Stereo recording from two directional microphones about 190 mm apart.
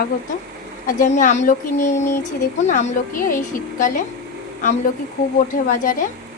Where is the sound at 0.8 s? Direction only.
40° left (ahead or behind).